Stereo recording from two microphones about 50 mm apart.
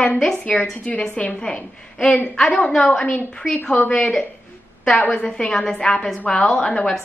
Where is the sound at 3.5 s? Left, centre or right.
Centre.